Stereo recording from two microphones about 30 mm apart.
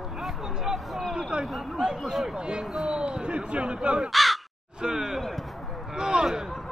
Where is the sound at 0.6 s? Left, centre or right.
Centre.